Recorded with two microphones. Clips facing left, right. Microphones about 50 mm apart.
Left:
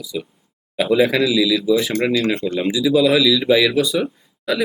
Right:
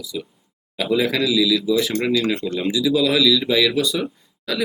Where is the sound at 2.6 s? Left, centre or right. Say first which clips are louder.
Left 3 dB; centre.